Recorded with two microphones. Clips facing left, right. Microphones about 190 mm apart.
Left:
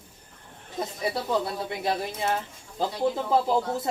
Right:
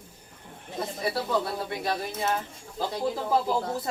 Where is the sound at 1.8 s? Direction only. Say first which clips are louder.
Left 2 dB; 20° left (ahead or behind).